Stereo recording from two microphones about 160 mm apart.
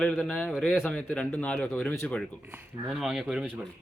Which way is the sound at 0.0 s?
5° left (ahead or behind).